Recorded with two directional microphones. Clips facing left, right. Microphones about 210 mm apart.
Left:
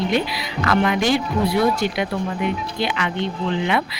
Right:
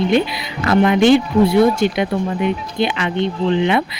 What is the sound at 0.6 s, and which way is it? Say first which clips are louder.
A woman's voice: right 7 dB; 25° right (ahead or behind).